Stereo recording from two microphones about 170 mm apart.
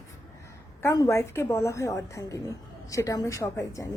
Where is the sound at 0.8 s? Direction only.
15° left (ahead or behind).